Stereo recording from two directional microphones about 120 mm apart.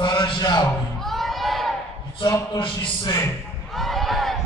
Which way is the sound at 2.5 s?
45° left (ahead or behind).